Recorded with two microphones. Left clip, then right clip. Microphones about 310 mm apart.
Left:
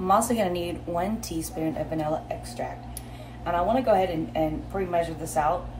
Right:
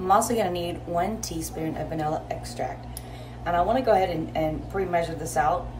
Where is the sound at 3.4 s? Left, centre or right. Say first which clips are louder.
Right 1 dB; centre.